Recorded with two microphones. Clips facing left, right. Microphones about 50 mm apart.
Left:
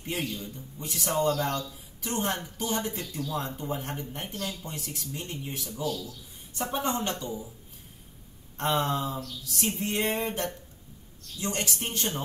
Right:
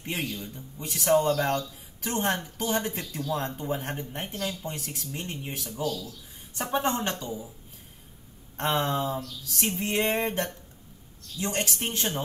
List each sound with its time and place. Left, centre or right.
0.1 s a man's voice: right
8.5 s a man's voice: right
11.5 s a man's voice: right